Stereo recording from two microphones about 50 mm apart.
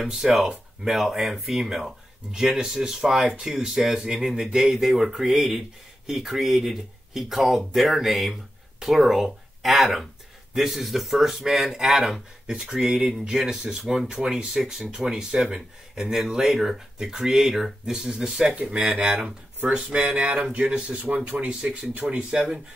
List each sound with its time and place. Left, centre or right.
0.0 s speech: centre
18.5 s speech: right